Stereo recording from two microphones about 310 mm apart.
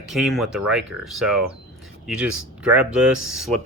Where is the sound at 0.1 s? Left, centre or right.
Centre.